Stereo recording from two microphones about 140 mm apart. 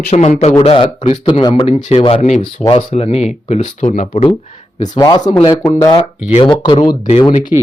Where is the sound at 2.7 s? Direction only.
45° left (ahead or behind).